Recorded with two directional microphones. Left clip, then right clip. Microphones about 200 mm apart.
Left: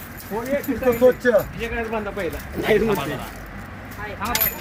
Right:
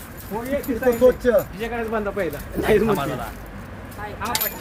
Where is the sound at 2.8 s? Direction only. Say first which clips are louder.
Right 1 dB; 35° right (ahead or behind).